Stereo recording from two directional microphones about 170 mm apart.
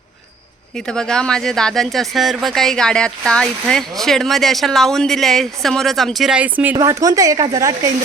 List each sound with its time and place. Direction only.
0.9 s speech: 5° left (ahead or behind)
6.7 s speech: 20° right (ahead or behind)